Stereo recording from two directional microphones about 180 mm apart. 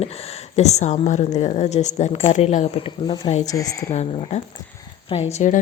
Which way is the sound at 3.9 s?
40° left (ahead or behind).